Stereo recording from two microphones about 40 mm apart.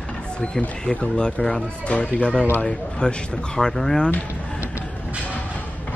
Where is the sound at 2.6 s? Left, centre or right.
Left.